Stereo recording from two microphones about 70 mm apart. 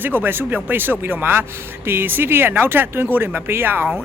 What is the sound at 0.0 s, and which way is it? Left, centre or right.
A man's voice, right.